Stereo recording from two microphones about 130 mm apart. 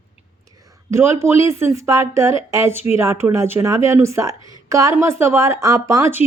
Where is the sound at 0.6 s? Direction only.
20° right (ahead or behind).